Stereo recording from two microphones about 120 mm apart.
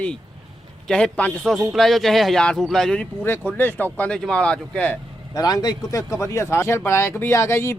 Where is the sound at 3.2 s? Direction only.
20° left (ahead or behind).